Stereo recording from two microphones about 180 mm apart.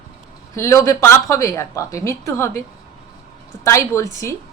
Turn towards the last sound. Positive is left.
turn(degrees=15)  # may be behind; listen again after turning